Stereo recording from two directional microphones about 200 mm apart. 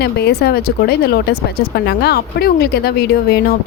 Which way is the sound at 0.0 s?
55° left (ahead or behind).